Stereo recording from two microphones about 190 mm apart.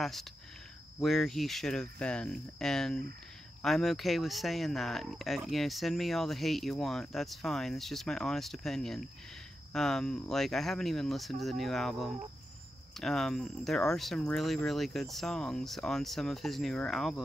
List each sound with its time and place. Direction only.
0.0 s speech: centre (ahead or behind)